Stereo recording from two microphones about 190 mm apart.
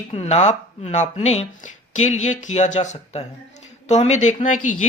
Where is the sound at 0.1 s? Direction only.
35° left (ahead or behind).